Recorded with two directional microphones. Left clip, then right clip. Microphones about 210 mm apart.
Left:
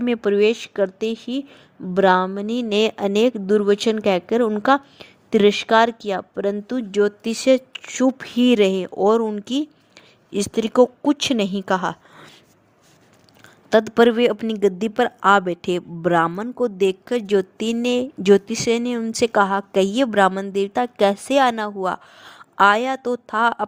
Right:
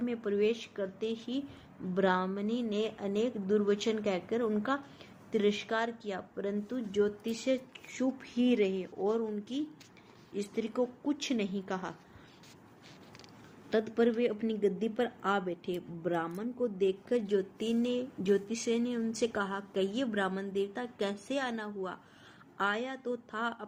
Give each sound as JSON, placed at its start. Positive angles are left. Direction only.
{"t": 0.0, "sound": "speech", "side_deg": 50}
{"t": 13.7, "sound": "speech", "side_deg": 50}